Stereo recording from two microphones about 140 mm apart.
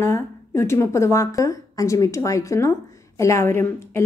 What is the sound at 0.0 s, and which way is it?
Speech, 20° left (ahead or behind).